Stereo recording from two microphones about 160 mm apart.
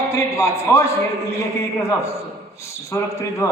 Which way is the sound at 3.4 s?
20° left (ahead or behind).